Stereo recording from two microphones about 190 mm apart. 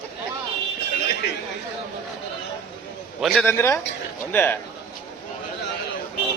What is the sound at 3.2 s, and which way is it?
Speech, centre (ahead or behind).